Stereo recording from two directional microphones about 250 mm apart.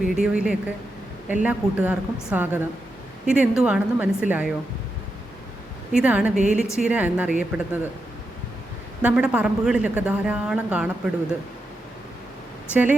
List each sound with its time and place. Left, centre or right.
0.0 s a woman's voice: centre
6.0 s a woman's voice: centre
6.3 s a woman's voice: right
6.8 s a woman's voice: centre
9.0 s a woman's voice: centre